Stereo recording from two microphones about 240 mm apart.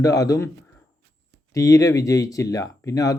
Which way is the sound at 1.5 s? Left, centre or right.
Centre.